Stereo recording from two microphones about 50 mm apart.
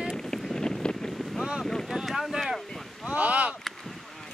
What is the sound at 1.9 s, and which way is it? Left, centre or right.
Speech, centre.